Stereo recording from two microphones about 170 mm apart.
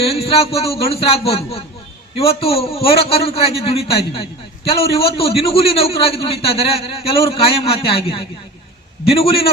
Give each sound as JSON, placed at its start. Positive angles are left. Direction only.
{"t": 0.0, "sound": "a man's voice", "side_deg": 35}